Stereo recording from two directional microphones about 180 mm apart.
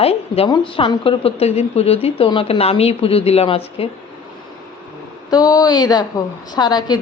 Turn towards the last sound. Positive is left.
turn(degrees=20)  # may be behind; listen again after turning